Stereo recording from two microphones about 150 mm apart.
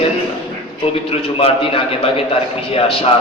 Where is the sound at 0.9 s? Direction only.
40° left (ahead or behind).